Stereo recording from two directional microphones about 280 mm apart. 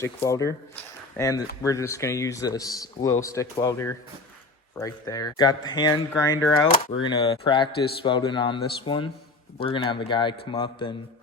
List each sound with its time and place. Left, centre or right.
0.0 s speech: centre